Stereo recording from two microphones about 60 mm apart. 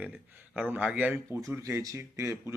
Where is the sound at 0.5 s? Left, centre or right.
Right.